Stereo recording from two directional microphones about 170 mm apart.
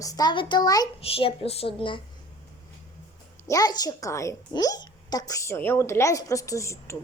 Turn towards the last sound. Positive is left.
turn(degrees=15)  # may be behind; listen again after turning